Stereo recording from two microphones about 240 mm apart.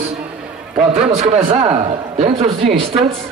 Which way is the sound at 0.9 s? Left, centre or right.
Right.